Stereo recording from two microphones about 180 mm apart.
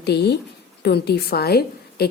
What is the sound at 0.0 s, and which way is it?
A woman's voice, 65° left (ahead or behind).